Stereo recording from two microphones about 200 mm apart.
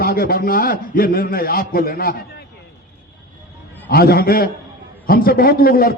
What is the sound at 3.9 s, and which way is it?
A man's voice, 50° left (ahead or behind).